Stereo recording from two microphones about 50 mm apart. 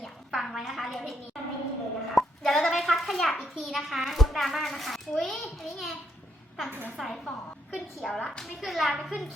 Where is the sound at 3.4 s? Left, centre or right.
Centre.